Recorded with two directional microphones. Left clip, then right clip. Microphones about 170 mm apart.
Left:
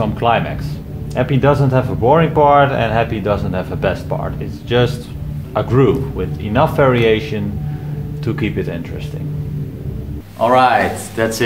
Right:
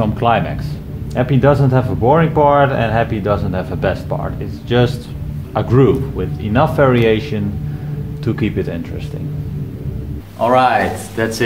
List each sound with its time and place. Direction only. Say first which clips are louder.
0.0 s speech: even; 35° right (ahead or behind)
10.4 s speech: left 1 dB; 10° right (ahead or behind)